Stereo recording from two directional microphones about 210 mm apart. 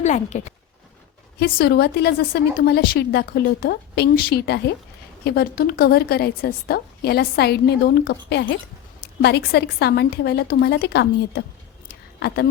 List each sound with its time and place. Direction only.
0.0 s speech: 35° left (ahead or behind)
1.4 s a woman's voice: 50° left (ahead or behind)